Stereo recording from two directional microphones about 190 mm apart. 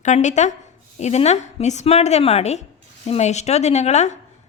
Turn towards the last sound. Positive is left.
turn(degrees=35)  # may be behind; listen again after turning